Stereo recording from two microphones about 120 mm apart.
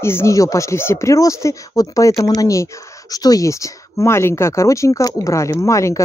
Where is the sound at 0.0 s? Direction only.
20° left (ahead or behind).